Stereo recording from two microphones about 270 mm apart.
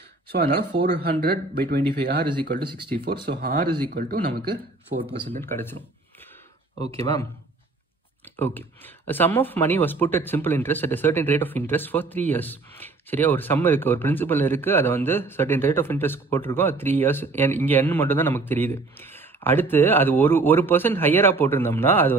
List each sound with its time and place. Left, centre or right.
0.3 s speech: right
5.4 s speech: centre
8.4 s speech: centre